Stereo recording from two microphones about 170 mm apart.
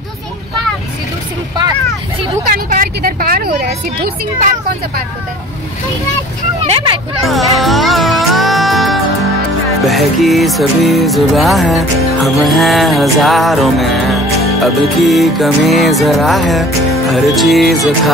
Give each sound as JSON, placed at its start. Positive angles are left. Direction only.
{"t": 2.4, "sound": "vehicle", "side_deg": -55}
{"t": 6.6, "sound": "speech", "side_deg": -30}
{"t": 7.2, "sound": "music", "side_deg": 0}